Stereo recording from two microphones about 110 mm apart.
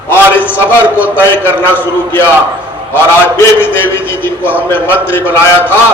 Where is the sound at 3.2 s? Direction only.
20° left (ahead or behind).